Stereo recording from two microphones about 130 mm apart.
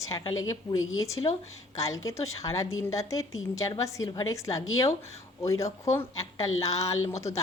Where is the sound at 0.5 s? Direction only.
25° left (ahead or behind).